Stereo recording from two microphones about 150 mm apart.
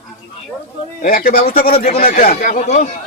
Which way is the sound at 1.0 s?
75° left (ahead or behind).